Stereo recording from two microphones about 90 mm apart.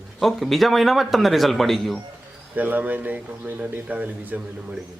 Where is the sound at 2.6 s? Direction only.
20° right (ahead or behind).